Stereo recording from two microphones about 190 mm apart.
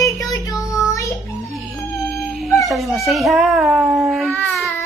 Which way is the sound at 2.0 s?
Centre (ahead or behind).